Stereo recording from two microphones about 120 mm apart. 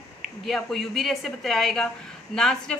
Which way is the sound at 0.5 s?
Centre (ahead or behind).